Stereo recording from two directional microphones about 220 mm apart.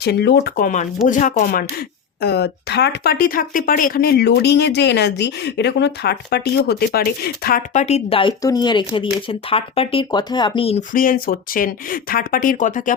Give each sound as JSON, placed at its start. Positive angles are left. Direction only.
{"t": 0.0, "sound": "speech", "side_deg": 50}
{"t": 2.2, "sound": "speech", "side_deg": 50}
{"t": 10.8, "sound": "speech", "side_deg": 40}